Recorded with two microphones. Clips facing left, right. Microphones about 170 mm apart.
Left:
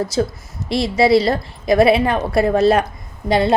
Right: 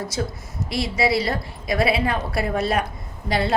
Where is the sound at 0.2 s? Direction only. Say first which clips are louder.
Left 7 dB; 35° left (ahead or behind).